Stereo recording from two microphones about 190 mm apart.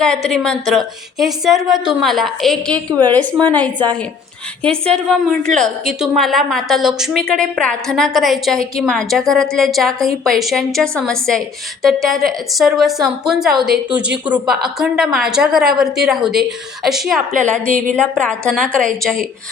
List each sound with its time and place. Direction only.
0.0 s a woman's voice: 5° left (ahead or behind)
17.7 s a woman's voice: 45° right (ahead or behind)
17.9 s a woman's voice: 5° left (ahead or behind)